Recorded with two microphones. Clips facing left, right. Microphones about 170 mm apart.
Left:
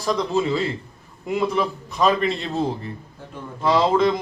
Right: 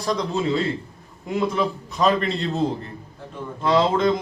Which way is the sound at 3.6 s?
Centre (ahead or behind).